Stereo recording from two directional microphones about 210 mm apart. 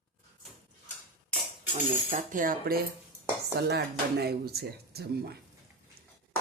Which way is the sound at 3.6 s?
50° right (ahead or behind).